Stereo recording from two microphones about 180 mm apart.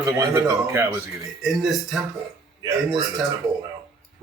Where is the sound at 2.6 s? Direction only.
20° right (ahead or behind).